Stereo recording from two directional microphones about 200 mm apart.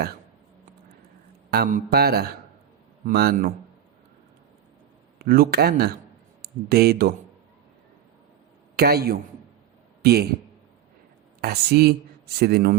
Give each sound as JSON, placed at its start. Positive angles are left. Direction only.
{"t": 1.5, "sound": "speech", "side_deg": -50}
{"t": 5.2, "sound": "speech", "side_deg": -50}
{"t": 8.7, "sound": "a man's voice", "side_deg": -50}
{"t": 11.3, "sound": "a woman's voice", "side_deg": -50}